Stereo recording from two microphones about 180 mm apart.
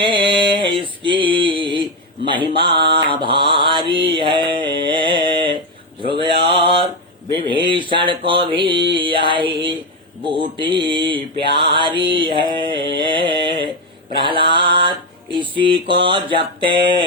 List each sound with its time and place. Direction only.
0.0 s male singing: 25° right (ahead or behind)
2.9 s mantra: 30° right (ahead or behind)
6.6 s mantra: 30° right (ahead or behind)
7.3 s a sound: 25° right (ahead or behind)
8.2 s mantra: 25° right (ahead or behind)
14.5 s music: 25° right (ahead or behind)
15.9 s mantra: 30° right (ahead or behind)